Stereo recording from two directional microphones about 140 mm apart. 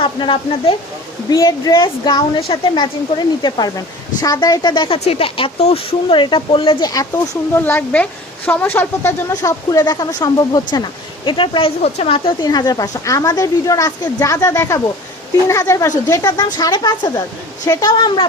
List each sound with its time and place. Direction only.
0.0 s speech: 35° left (ahead or behind)
1.3 s speech: 25° left (ahead or behind)
7.5 s a woman's voice: 15° left (ahead or behind); by 11.7 s 35° left (ahead or behind)
11.8 s speech: 45° left (ahead or behind)